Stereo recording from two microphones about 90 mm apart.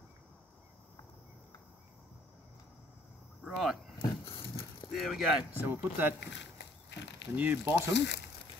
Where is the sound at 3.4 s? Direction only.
5° right (ahead or behind).